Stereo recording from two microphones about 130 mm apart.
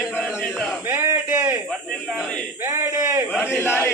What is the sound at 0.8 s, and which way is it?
Speech, 20° right (ahead or behind).